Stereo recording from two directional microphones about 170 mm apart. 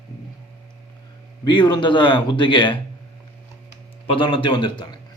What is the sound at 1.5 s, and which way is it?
A man's voice, 25° left (ahead or behind).